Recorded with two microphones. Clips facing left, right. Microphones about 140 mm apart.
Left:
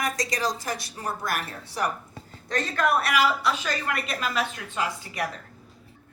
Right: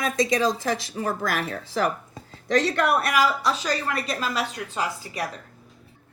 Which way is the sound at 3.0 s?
40° right (ahead or behind).